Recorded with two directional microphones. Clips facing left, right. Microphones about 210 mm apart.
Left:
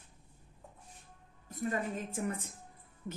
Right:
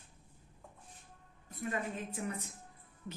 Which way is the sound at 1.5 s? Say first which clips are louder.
Left 3 dB; 45° left (ahead or behind).